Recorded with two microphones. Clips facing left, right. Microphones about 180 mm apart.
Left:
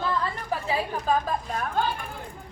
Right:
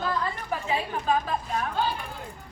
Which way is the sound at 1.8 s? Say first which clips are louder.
Left 2 dB; 50° left (ahead or behind).